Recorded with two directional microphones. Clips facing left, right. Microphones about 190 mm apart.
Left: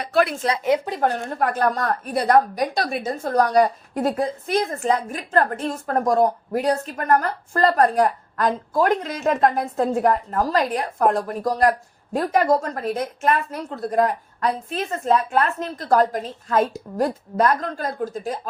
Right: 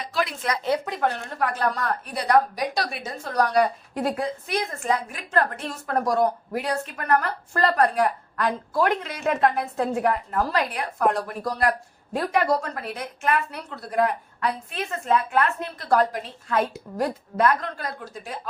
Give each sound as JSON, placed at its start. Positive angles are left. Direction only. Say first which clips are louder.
{"t": 0.0, "sound": "speech", "louder": "left 7 dB", "side_deg": 60}
{"t": 0.9, "sound": "a woman's voice", "louder": "left 4 dB", "side_deg": 40}